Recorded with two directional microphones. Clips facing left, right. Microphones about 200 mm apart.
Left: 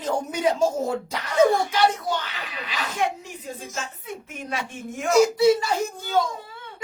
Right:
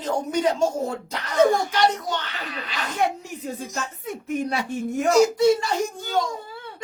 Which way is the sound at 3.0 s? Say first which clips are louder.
Right 3 dB; 40° right (ahead or behind).